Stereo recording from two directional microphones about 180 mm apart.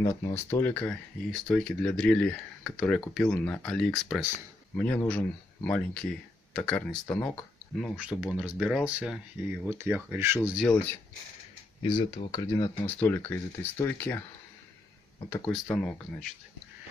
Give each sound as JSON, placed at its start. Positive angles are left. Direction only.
{"t": 0.0, "sound": "speech", "side_deg": 15}
{"t": 7.8, "sound": "speech", "side_deg": -5}
{"t": 11.8, "sound": "speech", "side_deg": 30}
{"t": 15.2, "sound": "speech", "side_deg": 15}